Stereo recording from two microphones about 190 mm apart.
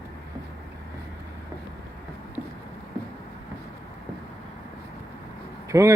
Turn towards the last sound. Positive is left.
turn(degrees=-15)  # may be behind; listen again after turning